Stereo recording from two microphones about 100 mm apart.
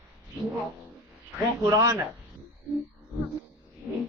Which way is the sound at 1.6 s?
35° right (ahead or behind).